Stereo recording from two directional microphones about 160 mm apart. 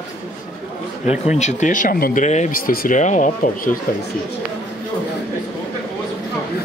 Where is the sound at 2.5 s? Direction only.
60° left (ahead or behind).